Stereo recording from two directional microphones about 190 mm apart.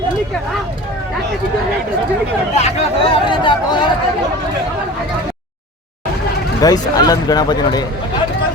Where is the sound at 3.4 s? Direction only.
25° left (ahead or behind).